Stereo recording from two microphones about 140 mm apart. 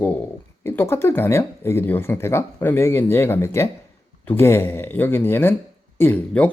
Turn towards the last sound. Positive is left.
turn(degrees=10)  # may be behind; listen again after turning